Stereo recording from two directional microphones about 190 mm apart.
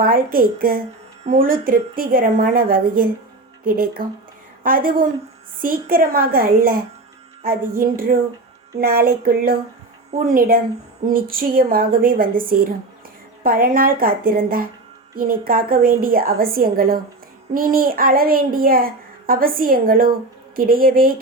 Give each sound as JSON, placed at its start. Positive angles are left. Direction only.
{"t": 0.0, "sound": "a child's voice", "side_deg": -50}